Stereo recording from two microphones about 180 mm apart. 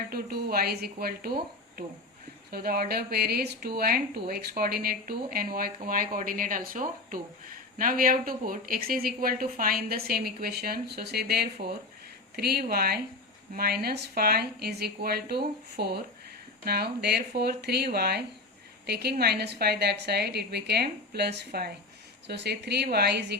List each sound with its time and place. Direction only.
0.1 s speech: 55° right (ahead or behind)